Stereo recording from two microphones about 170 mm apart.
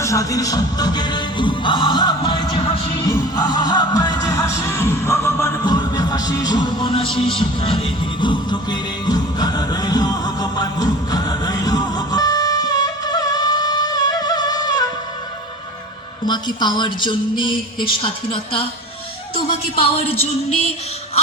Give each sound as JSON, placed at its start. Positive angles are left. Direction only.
{"t": 0.0, "sound": "music", "side_deg": 20}
{"t": 16.2, "sound": "a woman's voice", "side_deg": 25}